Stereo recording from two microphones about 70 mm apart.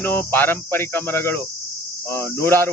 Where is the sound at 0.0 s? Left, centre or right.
Left.